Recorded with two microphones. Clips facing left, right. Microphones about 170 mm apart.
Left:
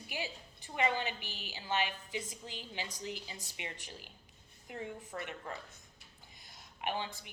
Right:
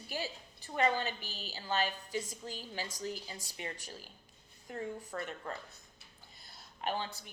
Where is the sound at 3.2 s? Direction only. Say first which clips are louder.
Right 1 dB; 15° left (ahead or behind).